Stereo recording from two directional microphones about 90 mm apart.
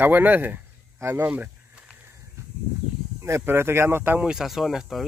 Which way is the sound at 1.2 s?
20° right (ahead or behind).